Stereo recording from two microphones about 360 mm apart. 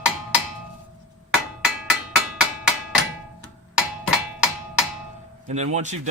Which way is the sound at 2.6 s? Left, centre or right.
Centre.